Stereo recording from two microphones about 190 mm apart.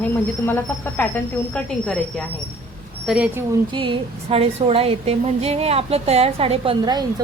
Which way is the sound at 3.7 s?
25° right (ahead or behind).